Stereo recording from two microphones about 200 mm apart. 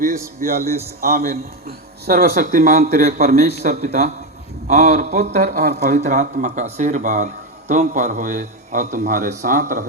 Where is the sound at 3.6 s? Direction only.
50° right (ahead or behind).